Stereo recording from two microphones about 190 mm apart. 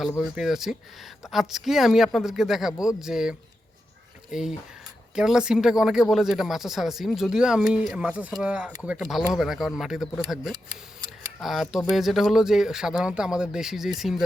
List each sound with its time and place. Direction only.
0.2 s speech: centre (ahead or behind)